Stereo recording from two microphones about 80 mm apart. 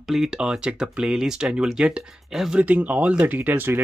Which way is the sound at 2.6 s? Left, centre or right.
Centre.